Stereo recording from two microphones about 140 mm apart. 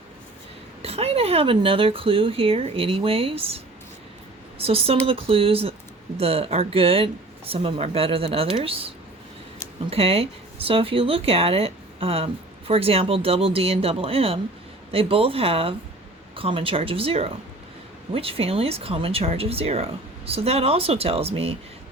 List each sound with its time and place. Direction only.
0.8 s speech: 45° right (ahead or behind)
9.9 s speech: 45° right (ahead or behind)